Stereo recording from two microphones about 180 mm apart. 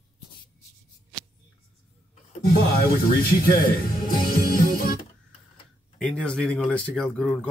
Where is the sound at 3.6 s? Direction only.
50° left (ahead or behind).